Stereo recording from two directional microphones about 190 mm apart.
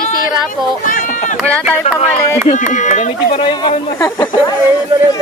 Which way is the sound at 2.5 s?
40° left (ahead or behind).